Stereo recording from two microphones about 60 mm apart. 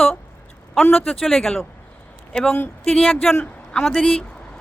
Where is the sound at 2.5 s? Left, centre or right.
Left.